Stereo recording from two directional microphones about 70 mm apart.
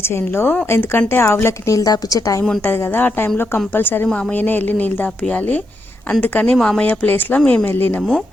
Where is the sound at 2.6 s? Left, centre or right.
Left.